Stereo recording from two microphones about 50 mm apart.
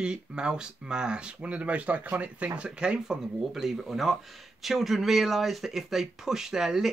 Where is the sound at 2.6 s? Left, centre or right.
Centre.